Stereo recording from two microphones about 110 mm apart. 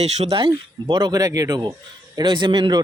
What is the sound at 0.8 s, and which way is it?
Speech, 40° right (ahead or behind).